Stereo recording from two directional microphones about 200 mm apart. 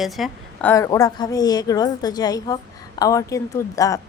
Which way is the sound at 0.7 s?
15° left (ahead or behind).